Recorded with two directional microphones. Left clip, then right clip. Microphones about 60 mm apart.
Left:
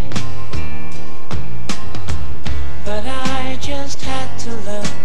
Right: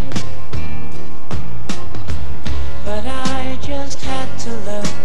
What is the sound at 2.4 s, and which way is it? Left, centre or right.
Music, right.